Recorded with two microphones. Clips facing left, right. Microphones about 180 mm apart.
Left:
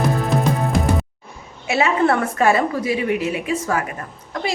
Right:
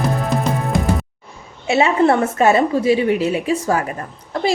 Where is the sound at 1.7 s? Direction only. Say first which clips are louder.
Right 3 dB; 25° right (ahead or behind).